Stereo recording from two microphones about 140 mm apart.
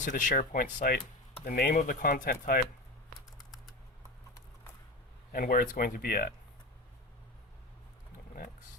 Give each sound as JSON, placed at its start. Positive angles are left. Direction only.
{"t": 0.0, "sound": "speech", "side_deg": 65}
{"t": 5.3, "sound": "speech", "side_deg": 90}